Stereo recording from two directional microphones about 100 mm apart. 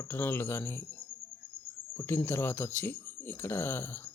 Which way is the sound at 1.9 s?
25° left (ahead or behind).